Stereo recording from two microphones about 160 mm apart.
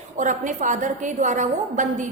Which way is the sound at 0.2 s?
50° right (ahead or behind).